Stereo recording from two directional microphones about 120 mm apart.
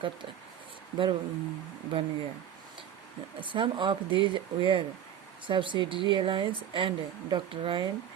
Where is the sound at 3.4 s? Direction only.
45° right (ahead or behind).